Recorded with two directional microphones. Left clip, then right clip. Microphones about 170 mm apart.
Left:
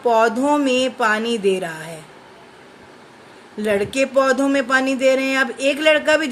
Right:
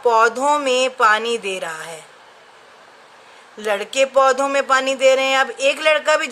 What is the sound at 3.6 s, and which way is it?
Speech, 20° right (ahead or behind).